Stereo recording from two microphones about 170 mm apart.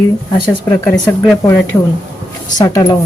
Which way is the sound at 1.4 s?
15° left (ahead or behind).